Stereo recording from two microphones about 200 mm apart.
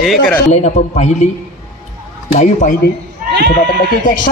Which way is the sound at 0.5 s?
35° left (ahead or behind).